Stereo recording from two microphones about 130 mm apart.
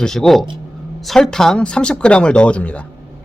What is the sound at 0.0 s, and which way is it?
Speech, 5° left (ahead or behind).